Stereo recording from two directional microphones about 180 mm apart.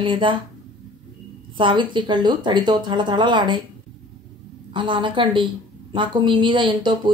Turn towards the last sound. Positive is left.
turn(degrees=-25)  # may be behind; listen again after turning